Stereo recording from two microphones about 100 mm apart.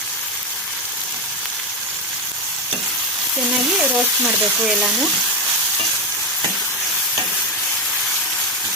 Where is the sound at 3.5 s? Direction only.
10° right (ahead or behind).